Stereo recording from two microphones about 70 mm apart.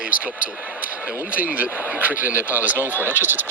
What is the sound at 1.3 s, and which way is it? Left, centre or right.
Speech, right.